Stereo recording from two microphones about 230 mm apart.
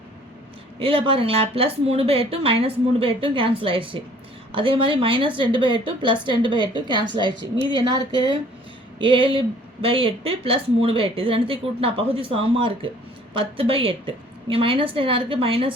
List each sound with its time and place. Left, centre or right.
0.8 s a woman's voice: right
9.0 s a woman's voice: right